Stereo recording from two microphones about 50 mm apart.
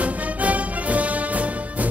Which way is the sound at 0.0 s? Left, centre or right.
Right.